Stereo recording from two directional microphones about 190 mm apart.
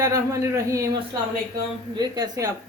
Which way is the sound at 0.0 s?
15° right (ahead or behind).